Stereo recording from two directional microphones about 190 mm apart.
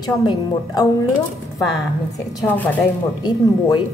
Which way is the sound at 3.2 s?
20° left (ahead or behind).